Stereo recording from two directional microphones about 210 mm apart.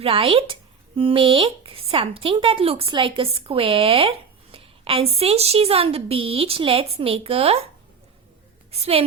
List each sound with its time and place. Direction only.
0.0 s speech: 25° right (ahead or behind)
8.7 s speech: 30° right (ahead or behind)